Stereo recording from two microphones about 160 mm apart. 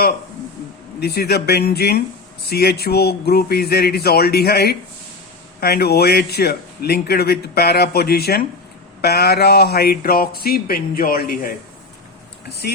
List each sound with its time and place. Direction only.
0.9 s a man's voice: 85° left; by 11.5 s 65° left (ahead or behind)